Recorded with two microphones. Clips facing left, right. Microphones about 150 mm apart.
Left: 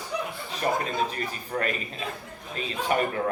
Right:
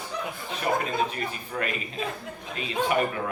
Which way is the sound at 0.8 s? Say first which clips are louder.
Right 1 dB; 40° left (ahead or behind).